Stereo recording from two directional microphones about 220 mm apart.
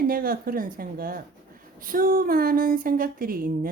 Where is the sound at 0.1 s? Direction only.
40° right (ahead or behind).